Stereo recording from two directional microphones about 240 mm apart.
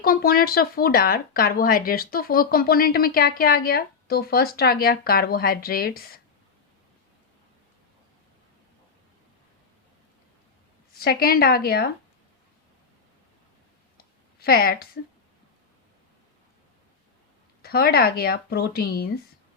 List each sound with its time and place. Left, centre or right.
0.0 s speech: left
11.0 s speech: left
14.3 s a woman's voice: left
17.6 s speech: left